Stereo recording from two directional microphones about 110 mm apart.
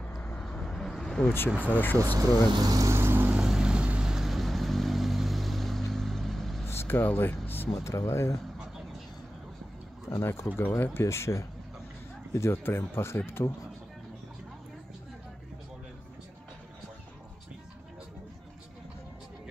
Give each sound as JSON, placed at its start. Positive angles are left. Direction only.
{"t": 0.0, "sound": "vehicle", "side_deg": 15}
{"t": 1.5, "sound": "speech", "side_deg": -10}
{"t": 2.5, "sound": "vehicle", "side_deg": -35}
{"t": 3.3, "sound": "vehicle", "side_deg": -10}
{"t": 6.7, "sound": "a sound", "side_deg": 20}
{"t": 7.8, "sound": "speech", "side_deg": 25}
{"t": 10.0, "sound": "speech", "side_deg": 25}